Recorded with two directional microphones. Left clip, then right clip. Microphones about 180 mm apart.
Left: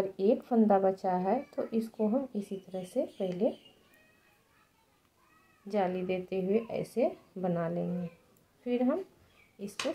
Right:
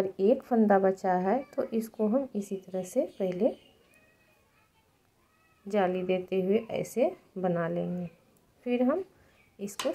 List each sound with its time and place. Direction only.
0.2 s a woman's voice: 25° right (ahead or behind)
5.7 s a woman's voice: 20° right (ahead or behind)